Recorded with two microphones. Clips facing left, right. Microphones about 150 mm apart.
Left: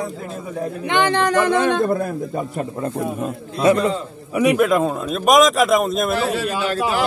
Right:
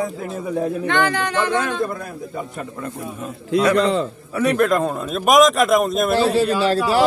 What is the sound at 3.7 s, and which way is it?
Speech, 90° right.